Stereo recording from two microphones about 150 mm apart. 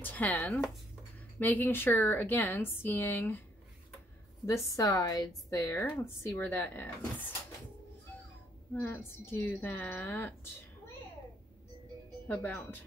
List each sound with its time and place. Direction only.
0.0 s a woman's voice: 10° left (ahead or behind)
4.5 s a woman's voice: 20° left (ahead or behind)
8.7 s a woman's voice: 15° left (ahead or behind)
12.3 s a woman's voice: 10° left (ahead or behind)